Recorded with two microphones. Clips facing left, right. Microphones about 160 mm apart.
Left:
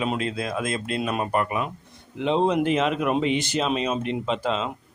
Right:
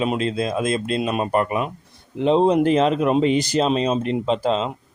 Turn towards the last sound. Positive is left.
turn(degrees=-35)  # may be behind; listen again after turning